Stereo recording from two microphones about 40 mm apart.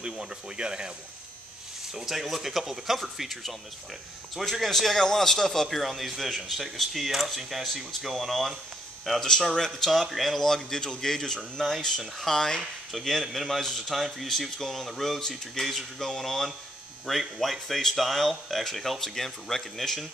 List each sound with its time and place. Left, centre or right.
0.0 s speech: right
2.0 s a man's voice: centre
12.9 s a man's voice: centre